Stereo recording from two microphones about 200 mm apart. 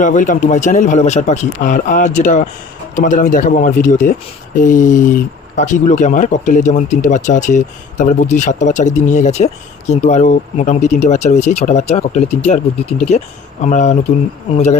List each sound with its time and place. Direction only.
0.0 s speech: 40° left (ahead or behind)